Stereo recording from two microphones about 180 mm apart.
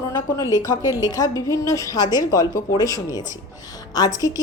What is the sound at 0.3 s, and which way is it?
A woman's voice, 15° left (ahead or behind).